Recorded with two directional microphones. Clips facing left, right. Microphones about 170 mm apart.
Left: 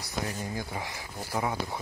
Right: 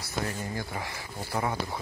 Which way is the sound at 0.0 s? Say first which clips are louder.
Right 1 dB; 15° left (ahead or behind).